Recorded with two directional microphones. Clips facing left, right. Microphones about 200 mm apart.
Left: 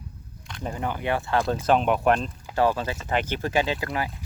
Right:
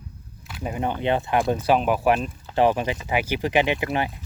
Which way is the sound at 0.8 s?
20° right (ahead or behind).